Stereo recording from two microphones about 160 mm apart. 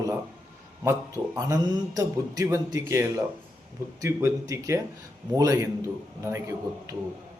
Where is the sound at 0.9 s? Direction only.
20° right (ahead or behind).